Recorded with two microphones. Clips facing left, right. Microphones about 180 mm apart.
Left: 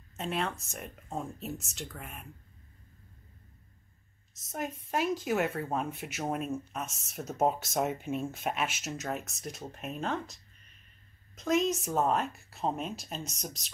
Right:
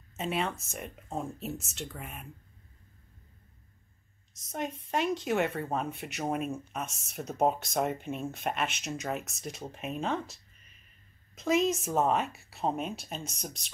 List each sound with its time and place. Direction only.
0.2 s speech: centre (ahead or behind)
4.5 s speech: centre (ahead or behind)